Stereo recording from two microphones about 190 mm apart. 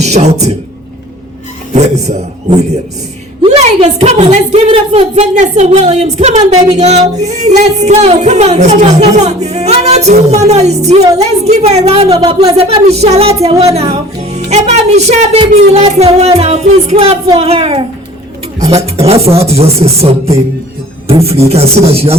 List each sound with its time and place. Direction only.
0.0 s a man's voice: 35° right (ahead or behind)
1.7 s speech: 35° right (ahead or behind)
3.4 s speech: 30° right (ahead or behind)
21.5 s speech: 30° right (ahead or behind)